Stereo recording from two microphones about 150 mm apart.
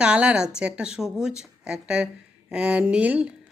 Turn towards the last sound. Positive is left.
turn(degrees=-10)  # may be behind; listen again after turning